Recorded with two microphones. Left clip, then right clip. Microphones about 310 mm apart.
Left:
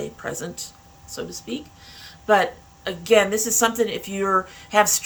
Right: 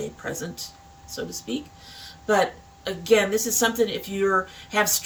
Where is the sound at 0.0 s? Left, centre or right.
Centre.